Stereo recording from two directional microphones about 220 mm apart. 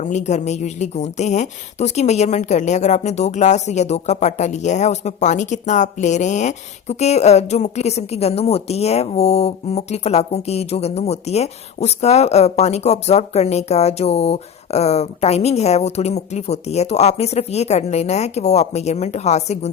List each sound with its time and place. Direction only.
0.0 s speech: 30° left (ahead or behind)